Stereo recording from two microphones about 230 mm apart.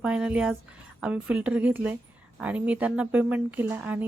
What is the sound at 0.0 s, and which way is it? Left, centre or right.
Speech, centre.